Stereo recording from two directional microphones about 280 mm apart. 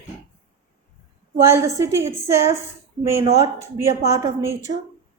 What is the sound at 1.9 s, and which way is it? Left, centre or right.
A woman's voice, centre.